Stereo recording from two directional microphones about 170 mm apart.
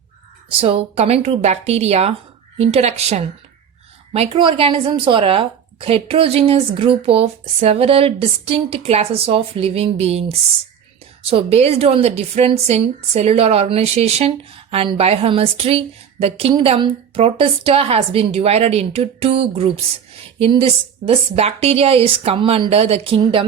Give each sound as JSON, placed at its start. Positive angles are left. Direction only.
{"t": 0.6, "sound": "a woman's voice", "side_deg": -35}